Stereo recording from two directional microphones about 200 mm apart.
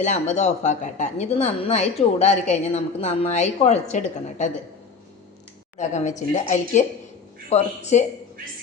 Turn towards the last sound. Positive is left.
turn(degrees=35)  # may be behind; listen again after turning